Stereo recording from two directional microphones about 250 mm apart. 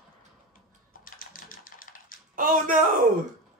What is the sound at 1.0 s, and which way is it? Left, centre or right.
Typewriter, left.